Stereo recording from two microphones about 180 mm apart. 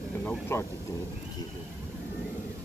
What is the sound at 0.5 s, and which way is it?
Speech, 15° left (ahead or behind).